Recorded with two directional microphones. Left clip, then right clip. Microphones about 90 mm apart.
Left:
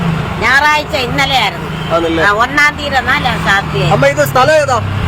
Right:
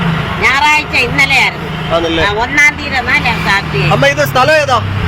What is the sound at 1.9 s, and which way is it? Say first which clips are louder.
Speech: left 1 dB; 15° left (ahead or behind).